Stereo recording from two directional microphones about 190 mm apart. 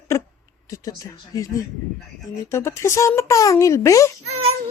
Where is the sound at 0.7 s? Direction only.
20° left (ahead or behind).